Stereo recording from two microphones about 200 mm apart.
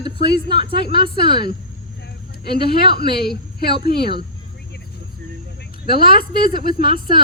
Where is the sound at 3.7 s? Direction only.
25° right (ahead or behind).